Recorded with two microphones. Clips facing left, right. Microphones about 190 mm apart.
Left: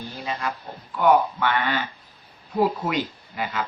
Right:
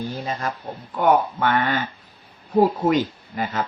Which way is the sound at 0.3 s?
45° right (ahead or behind).